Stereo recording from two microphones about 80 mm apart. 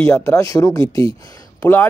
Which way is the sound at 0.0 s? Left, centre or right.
Left.